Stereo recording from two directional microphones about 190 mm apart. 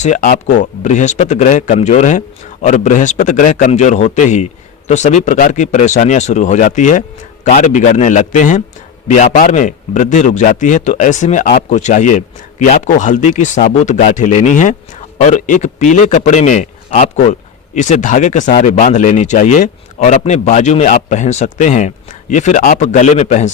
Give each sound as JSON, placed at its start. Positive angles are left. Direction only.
{"t": 0.0, "sound": "a man's voice", "side_deg": 45}